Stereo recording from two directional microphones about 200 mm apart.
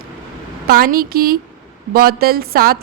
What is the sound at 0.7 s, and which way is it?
Speech, 50° right (ahead or behind).